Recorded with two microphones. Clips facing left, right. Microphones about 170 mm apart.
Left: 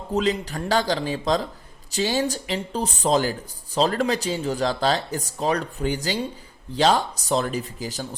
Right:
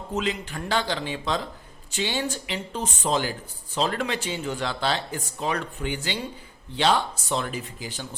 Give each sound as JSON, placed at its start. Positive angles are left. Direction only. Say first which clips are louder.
{"t": 0.1, "sound": "speech", "louder": "left 5 dB", "side_deg": 35}